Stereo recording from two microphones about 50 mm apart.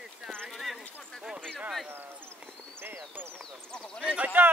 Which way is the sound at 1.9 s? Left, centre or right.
Right.